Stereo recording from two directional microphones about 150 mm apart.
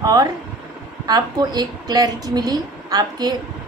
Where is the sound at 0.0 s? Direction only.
25° right (ahead or behind).